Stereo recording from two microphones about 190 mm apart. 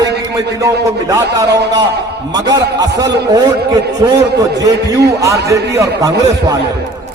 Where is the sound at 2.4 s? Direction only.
20° right (ahead or behind).